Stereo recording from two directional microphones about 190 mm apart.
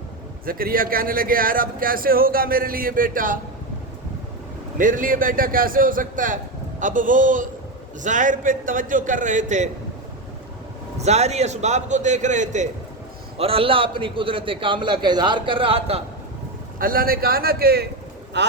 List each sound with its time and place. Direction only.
0.4 s speech: 50° right (ahead or behind)
4.8 s speech: 45° right (ahead or behind)
10.9 s a man's voice: 35° right (ahead or behind)
16.7 s speech: 50° right (ahead or behind)